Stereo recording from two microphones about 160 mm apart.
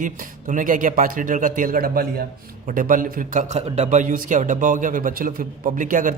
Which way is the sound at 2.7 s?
55° right (ahead or behind).